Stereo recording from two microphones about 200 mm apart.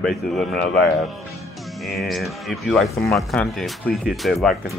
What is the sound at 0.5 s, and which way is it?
Speech, 55° left (ahead or behind).